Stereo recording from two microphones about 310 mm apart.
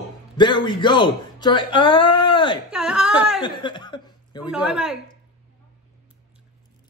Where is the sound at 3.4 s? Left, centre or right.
Centre.